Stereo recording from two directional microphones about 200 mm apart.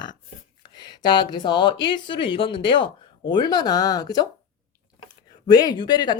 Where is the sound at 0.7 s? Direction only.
20° left (ahead or behind).